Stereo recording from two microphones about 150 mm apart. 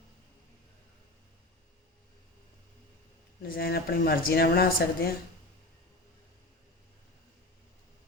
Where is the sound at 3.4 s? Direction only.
90° left.